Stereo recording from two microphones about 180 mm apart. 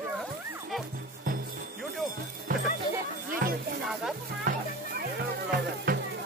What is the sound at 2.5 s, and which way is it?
Music, 50° right (ahead or behind).